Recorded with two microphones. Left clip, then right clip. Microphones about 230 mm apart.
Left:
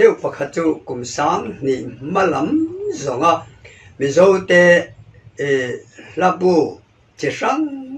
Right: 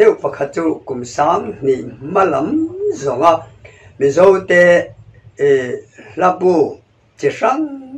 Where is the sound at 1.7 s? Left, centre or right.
Left.